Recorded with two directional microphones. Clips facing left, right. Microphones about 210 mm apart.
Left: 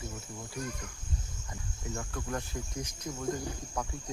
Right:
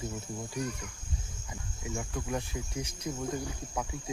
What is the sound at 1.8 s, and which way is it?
Cricket, 15° right (ahead or behind).